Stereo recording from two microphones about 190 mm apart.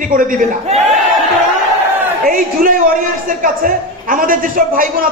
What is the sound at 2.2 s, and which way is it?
A man's voice, 45° right (ahead or behind).